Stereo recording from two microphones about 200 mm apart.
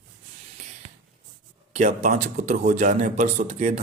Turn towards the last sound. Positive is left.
turn(degrees=-40)  # may be behind; listen again after turning